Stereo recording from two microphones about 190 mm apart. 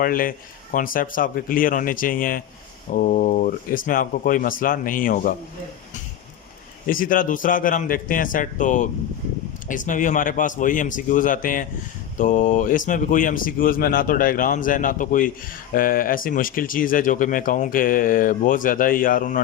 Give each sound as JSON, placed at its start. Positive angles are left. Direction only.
{"t": 0.0, "sound": "speech", "side_deg": 50}
{"t": 6.8, "sound": "speech", "side_deg": 45}